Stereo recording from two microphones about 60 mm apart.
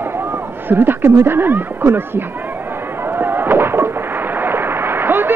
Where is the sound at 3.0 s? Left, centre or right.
Right.